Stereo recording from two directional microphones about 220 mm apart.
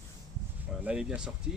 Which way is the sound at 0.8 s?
5° right (ahead or behind).